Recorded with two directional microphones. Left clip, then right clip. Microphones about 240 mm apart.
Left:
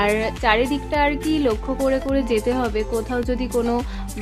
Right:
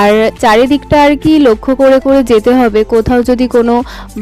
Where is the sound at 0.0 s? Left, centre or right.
Right.